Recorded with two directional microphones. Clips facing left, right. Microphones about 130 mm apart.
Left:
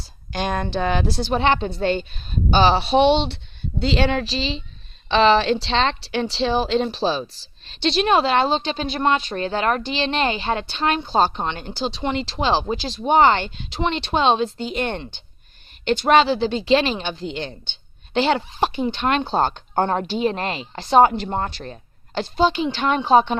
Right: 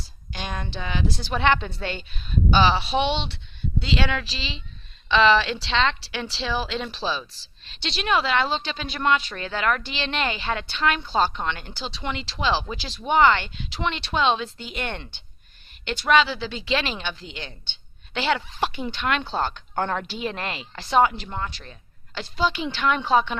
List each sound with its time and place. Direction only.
0.3 s speech: 50° left (ahead or behind)
1.2 s a woman's voice: 25° left (ahead or behind)
12.3 s a woman's voice: 45° left (ahead or behind)
18.1 s a woman's voice: 30° left (ahead or behind)
21.0 s a woman's voice: 40° left (ahead or behind)
22.4 s a woman's voice: 30° left (ahead or behind)